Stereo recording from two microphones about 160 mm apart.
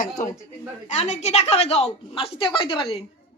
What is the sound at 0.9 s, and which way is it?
Speech, 45° left (ahead or behind).